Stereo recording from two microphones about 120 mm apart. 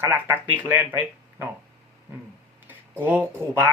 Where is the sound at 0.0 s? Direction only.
20° right (ahead or behind).